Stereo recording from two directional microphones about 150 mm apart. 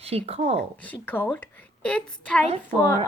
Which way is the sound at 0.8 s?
10° left (ahead or behind).